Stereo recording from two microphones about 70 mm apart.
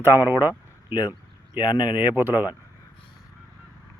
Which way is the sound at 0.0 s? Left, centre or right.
Right.